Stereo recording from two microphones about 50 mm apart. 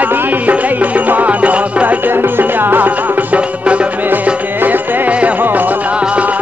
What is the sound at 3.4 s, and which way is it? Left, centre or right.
Music, right.